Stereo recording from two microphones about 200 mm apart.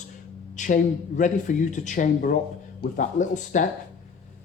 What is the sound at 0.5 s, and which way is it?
Speech, 40° left (ahead or behind).